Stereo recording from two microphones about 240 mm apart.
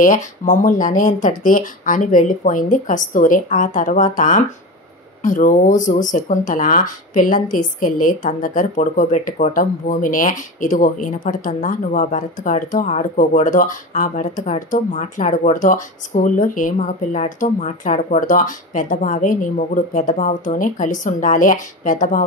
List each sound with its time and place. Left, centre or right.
0.0 s speech: left